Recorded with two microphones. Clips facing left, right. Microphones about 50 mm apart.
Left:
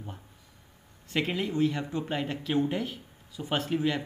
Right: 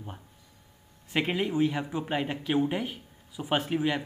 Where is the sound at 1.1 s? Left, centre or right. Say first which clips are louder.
Right 2 dB; centre.